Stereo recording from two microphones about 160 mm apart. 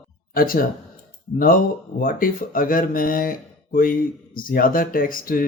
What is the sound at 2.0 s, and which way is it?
Speech, 60° left (ahead or behind).